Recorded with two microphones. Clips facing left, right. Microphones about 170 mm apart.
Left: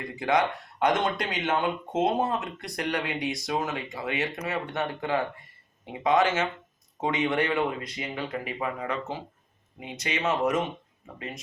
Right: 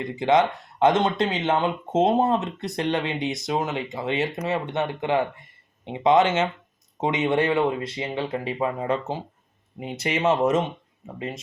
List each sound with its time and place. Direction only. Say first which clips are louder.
0.0 s speech: right 5 dB; 25° right (ahead or behind)